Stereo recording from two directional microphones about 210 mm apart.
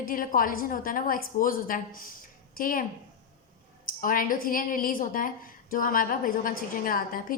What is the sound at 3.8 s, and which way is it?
A woman's voice, 40° left (ahead or behind).